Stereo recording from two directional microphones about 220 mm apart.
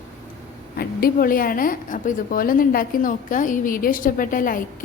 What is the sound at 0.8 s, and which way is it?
A woman's voice, 40° left (ahead or behind).